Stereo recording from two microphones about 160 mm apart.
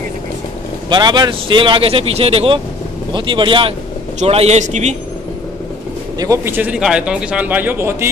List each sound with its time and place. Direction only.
0.8 s speech: 25° right (ahead or behind)
4.2 s a man's voice: 40° right (ahead or behind)
6.1 s speech: 20° right (ahead or behind)